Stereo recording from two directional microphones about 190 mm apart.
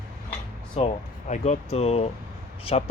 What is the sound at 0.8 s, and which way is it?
Speech, 30° left (ahead or behind).